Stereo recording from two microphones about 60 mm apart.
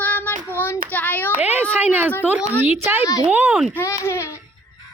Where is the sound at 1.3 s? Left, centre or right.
Right.